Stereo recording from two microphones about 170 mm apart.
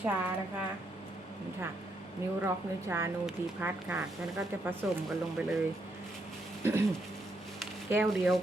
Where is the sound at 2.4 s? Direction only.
15° right (ahead or behind).